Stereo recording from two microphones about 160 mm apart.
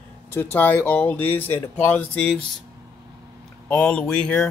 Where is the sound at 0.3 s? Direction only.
10° left (ahead or behind).